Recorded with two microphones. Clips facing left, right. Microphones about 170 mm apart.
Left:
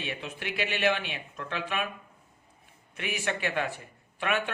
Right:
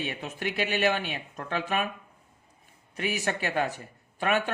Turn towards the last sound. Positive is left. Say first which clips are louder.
# right 3 dB
turn(degrees=-40)  # may be behind; listen again after turning